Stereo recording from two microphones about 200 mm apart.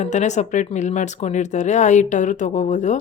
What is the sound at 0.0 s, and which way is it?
Speech, 35° left (ahead or behind).